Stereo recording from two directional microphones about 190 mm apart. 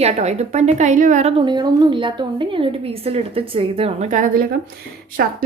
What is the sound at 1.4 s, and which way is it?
A woman's voice, 25° right (ahead or behind).